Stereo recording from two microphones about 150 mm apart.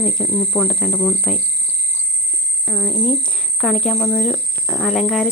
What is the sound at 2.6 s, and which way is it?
Cricket, centre (ahead or behind).